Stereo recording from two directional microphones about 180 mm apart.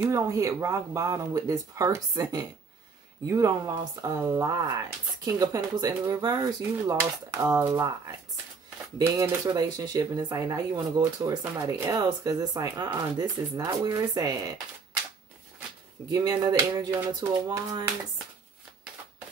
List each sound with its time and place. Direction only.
0.0 s speech: 15° right (ahead or behind)
8.9 s speech: 15° right (ahead or behind)
16.1 s speech: 20° right (ahead or behind)